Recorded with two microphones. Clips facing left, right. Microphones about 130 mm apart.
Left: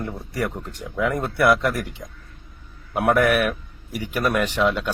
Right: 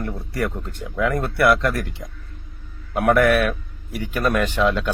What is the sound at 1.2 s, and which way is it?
Speech, 15° left (ahead or behind).